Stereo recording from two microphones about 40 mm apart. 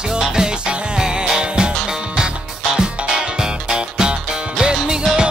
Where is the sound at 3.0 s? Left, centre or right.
Centre.